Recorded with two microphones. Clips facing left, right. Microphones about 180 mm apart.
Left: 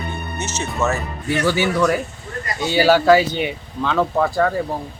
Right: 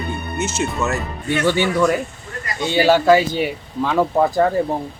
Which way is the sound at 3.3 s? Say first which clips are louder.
Right 2 dB; 5° right (ahead or behind).